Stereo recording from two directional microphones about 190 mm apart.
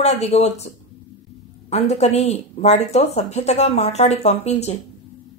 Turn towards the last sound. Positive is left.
turn(degrees=35)  # may be behind; listen again after turning